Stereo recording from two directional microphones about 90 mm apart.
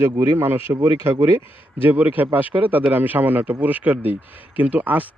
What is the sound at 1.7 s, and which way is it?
Speech, 20° right (ahead or behind).